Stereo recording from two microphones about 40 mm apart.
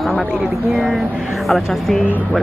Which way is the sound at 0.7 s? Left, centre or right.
Centre.